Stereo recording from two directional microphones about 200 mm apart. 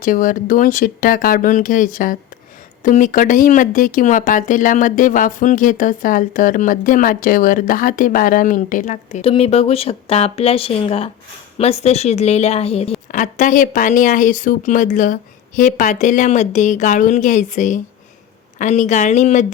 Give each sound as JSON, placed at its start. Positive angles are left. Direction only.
{"t": 0.0, "sound": "speech", "side_deg": 45}